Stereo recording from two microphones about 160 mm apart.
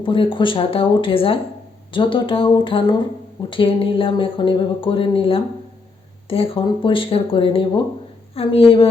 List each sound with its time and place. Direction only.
0.0 s speech: 30° left (ahead or behind)